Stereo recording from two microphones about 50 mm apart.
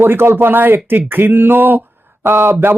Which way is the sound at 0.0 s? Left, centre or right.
Right.